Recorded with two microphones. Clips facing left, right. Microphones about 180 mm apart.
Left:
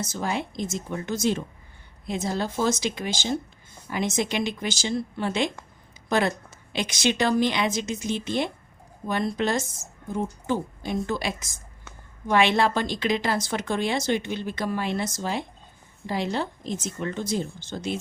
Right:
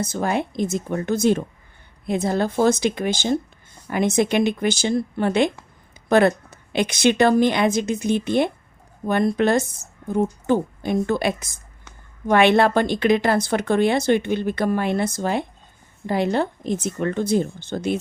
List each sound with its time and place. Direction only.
0.0 s speech: 55° right (ahead or behind)